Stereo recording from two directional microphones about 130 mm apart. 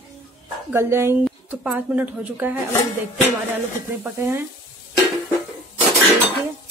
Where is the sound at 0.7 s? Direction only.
20° right (ahead or behind).